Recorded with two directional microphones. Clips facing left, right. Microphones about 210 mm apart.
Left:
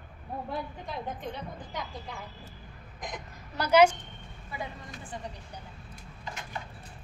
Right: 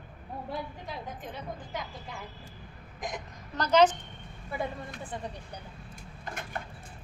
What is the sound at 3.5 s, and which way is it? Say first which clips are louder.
Speech: left 1 dB; 10° left (ahead or behind).